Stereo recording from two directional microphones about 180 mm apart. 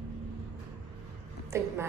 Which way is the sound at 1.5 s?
15° right (ahead or behind).